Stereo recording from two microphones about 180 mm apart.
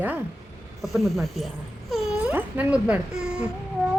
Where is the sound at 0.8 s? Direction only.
Centre (ahead or behind).